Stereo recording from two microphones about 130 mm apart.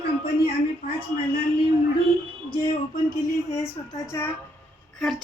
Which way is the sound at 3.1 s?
25° left (ahead or behind).